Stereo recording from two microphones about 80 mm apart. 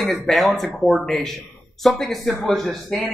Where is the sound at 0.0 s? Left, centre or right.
Centre.